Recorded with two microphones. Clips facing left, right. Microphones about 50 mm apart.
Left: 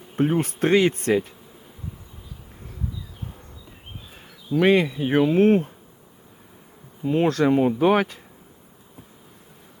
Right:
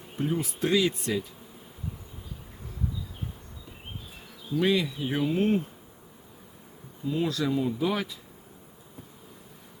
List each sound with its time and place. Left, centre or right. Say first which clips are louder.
0.2 s speech: left 7 dB; left
4.5 s speech: left 7 dB; left
7.0 s speech: left 8 dB; left